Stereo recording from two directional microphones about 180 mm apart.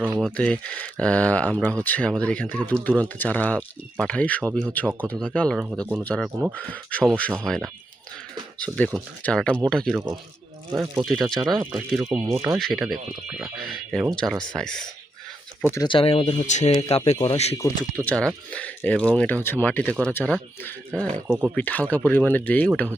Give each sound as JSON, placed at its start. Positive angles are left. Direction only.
{"t": 0.2, "sound": "speech", "side_deg": 5}
{"t": 15.7, "sound": "speech", "side_deg": 25}
{"t": 17.9, "sound": "speech", "side_deg": 5}
{"t": 21.2, "sound": "speech", "side_deg": -10}
{"t": 21.5, "sound": "speech", "side_deg": 10}